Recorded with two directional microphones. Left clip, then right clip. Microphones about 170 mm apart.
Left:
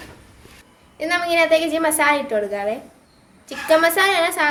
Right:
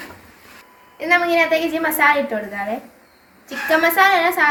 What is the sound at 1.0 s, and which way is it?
A woman's voice, 60° left (ahead or behind).